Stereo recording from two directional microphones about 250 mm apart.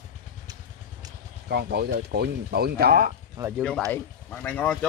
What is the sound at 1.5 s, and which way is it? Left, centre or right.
Speech, right.